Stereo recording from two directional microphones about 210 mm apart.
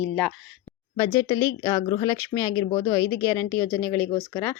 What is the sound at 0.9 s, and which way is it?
Speech, 20° left (ahead or behind).